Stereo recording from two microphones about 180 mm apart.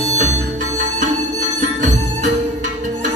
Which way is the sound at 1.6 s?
45° right (ahead or behind).